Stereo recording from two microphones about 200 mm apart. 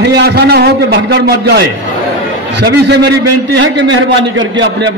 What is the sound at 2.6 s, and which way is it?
Speech, 60° right (ahead or behind).